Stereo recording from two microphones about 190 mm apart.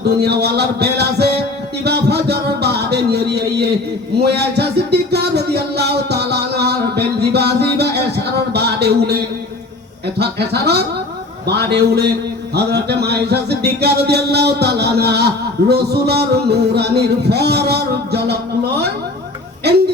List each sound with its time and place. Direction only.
0.0 s music: 60° right (ahead or behind)
1.8 s a sound: 60° right (ahead or behind)
10.2 s music: 60° right (ahead or behind)